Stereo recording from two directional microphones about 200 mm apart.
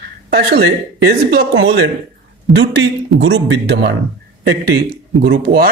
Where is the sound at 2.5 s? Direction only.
60° right (ahead or behind).